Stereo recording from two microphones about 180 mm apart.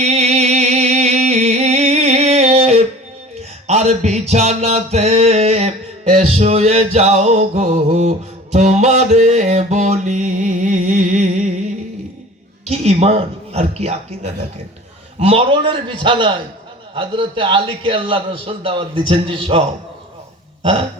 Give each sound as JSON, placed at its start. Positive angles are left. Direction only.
{"t": 0.0, "sound": "music", "side_deg": -35}
{"t": 12.7, "sound": "a man's voice", "side_deg": -35}